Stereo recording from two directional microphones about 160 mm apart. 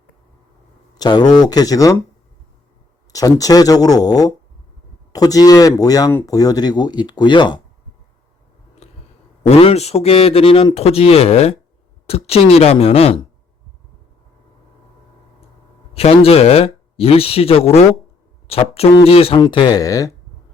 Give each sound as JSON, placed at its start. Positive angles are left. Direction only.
{"t": 0.9, "sound": "speech", "side_deg": 25}
{"t": 3.1, "sound": "speech", "side_deg": 20}
{"t": 8.8, "sound": "a sound", "side_deg": 40}
{"t": 9.5, "sound": "speech", "side_deg": 40}
{"t": 16.0, "sound": "speech", "side_deg": 40}